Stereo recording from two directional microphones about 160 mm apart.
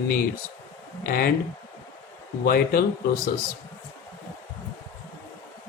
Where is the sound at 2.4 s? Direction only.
65° left (ahead or behind).